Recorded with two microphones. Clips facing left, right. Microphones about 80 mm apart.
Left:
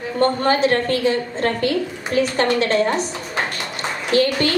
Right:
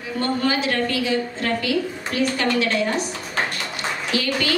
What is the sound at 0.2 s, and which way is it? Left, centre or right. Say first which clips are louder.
A woman's voice: left 6 dB; left.